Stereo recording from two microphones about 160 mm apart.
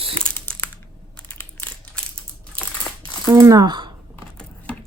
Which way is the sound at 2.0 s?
5° left (ahead or behind).